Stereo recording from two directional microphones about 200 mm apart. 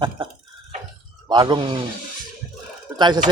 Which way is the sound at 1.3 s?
20° right (ahead or behind).